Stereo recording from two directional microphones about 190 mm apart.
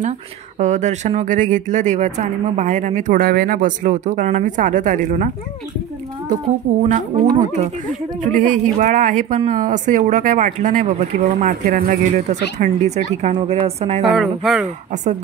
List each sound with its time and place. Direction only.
0.6 s speech: 40° right (ahead or behind)
14.0 s speech: centre (ahead or behind)